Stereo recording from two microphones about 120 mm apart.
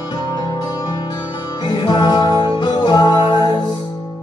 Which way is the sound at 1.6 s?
40° left (ahead or behind).